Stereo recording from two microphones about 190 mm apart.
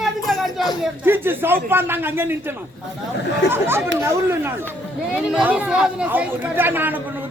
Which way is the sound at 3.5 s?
10° right (ahead or behind).